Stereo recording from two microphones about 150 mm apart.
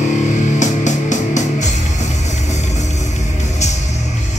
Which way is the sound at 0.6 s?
55° left (ahead or behind).